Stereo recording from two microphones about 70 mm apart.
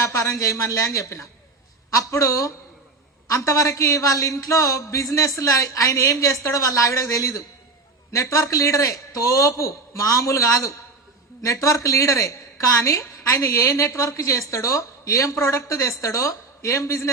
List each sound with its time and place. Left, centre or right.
0.0 s a woman's voice: left